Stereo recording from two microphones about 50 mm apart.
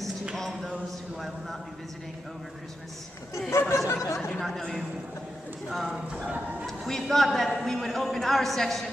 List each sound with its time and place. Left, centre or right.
0.4 s a sound: centre
3.4 s speech: left
4.4 s a woman's voice: centre
6.9 s a woman's voice: centre